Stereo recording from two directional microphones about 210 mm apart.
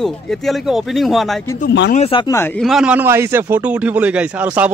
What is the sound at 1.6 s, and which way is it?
Speech, 55° left (ahead or behind).